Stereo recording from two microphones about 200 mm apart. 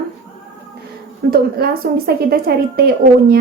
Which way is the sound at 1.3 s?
50° right (ahead or behind).